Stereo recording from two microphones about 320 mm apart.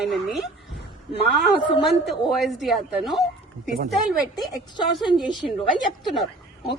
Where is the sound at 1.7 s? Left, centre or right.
Centre.